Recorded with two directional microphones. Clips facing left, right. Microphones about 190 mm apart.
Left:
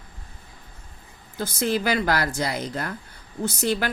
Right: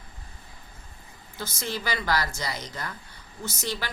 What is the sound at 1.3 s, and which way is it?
A woman's voice, 55° left (ahead or behind).